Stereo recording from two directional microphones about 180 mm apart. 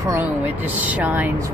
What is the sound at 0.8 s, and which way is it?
Speech, 10° right (ahead or behind).